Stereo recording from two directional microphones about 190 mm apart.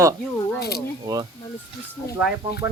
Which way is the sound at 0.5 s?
55° left (ahead or behind).